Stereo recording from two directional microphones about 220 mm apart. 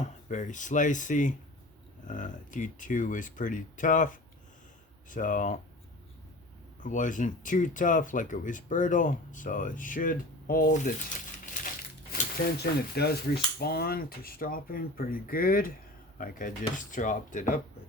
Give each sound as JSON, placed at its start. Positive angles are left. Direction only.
{"t": 0.0, "sound": "speech", "side_deg": 35}
{"t": 6.8, "sound": "speech", "side_deg": 35}
{"t": 12.5, "sound": "speech", "side_deg": 45}